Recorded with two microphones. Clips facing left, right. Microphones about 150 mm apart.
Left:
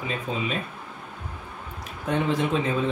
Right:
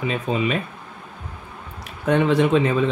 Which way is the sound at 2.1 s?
75° right (ahead or behind).